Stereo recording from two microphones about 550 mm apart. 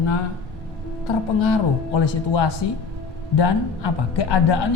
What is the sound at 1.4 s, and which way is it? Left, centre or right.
Speech, left.